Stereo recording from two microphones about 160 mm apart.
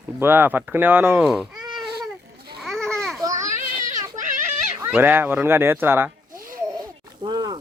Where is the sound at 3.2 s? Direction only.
20° right (ahead or behind).